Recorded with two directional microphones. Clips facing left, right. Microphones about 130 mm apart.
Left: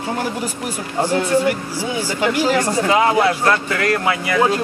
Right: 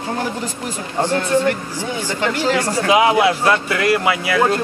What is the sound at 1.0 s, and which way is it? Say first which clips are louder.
Speech: even; 15° left (ahead or behind).